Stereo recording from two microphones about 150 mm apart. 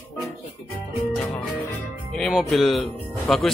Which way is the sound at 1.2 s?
5° left (ahead or behind).